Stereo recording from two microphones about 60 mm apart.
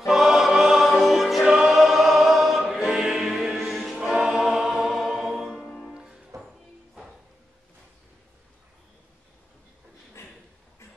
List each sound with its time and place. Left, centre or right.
0.0 s music: centre
2.7 s choir: centre
5.6 s music: centre
5.9 s music: centre
10.2 s a sound: left